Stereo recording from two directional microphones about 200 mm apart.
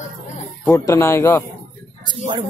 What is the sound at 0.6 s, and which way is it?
Speech, 15° left (ahead or behind).